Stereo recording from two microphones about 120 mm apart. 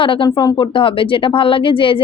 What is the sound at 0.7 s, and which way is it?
A woman's voice, 45° left (ahead or behind).